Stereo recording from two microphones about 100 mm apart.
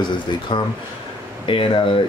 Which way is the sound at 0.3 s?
50° left (ahead or behind).